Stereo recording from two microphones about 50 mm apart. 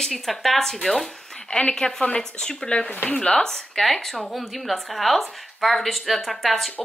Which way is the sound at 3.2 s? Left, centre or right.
Centre.